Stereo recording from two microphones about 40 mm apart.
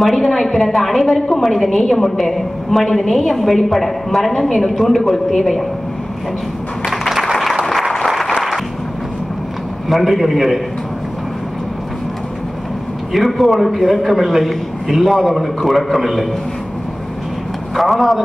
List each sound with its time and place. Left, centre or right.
0.0 s a woman's voice: centre
6.9 s applause: centre
9.8 s a woman's voice: centre
13.1 s a woman's voice: centre
17.7 s a woman's voice: centre